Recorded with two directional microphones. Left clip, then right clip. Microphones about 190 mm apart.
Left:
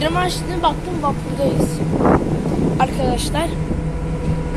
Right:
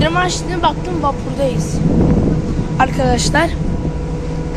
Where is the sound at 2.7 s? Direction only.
15° right (ahead or behind).